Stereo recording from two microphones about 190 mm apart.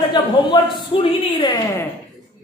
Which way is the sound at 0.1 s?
25° left (ahead or behind).